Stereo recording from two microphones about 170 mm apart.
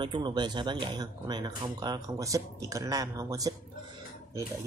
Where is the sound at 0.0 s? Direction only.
25° right (ahead or behind).